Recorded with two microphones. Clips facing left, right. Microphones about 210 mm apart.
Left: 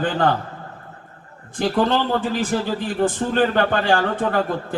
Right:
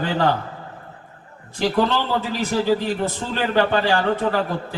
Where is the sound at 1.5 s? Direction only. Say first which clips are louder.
Left 1 dB; 50° left (ahead or behind).